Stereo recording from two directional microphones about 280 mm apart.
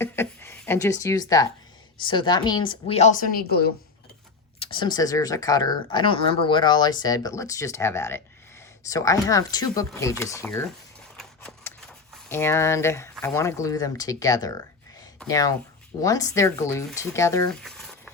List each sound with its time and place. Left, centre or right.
0.0 s a sound: centre
2.0 s a woman's voice: centre; by 3.7 s left
4.6 s speech: centre